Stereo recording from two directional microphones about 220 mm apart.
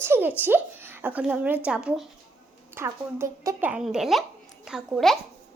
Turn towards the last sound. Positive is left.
turn(degrees=0)  # may be behind; listen again after turning